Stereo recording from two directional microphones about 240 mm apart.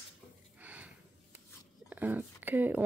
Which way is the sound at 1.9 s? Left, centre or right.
Centre.